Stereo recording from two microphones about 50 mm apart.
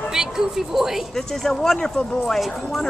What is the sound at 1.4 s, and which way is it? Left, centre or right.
Speech, centre.